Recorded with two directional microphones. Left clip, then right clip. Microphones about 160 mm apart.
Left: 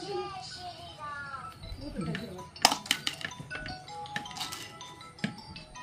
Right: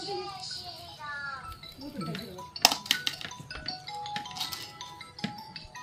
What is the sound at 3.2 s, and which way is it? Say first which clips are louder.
Music: left 2 dB; centre (ahead or behind).